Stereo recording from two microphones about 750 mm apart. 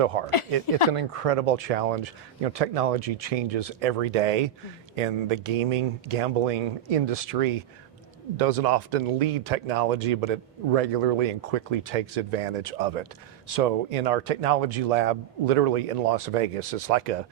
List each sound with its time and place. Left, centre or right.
0.0 s speech: right
0.3 s speech: left
0.9 s speech: right